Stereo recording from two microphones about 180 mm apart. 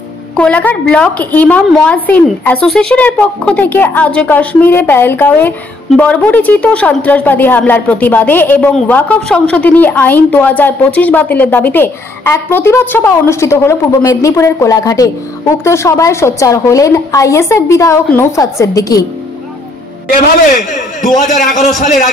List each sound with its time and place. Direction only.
0.4 s a woman's voice: 5° left (ahead or behind)
21.4 s a man's voice: 45° left (ahead or behind)